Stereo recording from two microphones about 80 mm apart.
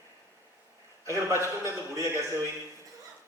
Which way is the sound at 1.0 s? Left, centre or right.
Right.